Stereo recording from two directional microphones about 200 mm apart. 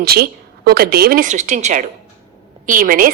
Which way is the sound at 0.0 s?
50° right (ahead or behind).